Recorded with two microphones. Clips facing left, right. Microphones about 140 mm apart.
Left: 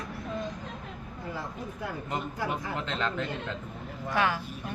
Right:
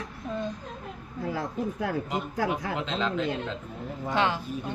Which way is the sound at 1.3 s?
90° right.